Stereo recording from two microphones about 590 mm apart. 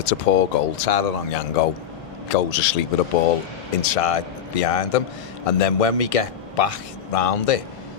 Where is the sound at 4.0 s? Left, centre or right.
Left.